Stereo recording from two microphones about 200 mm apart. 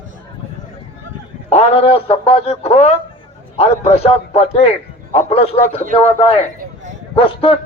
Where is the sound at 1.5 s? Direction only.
30° left (ahead or behind).